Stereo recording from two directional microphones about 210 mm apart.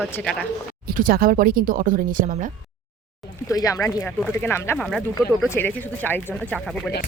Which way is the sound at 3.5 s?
15° left (ahead or behind).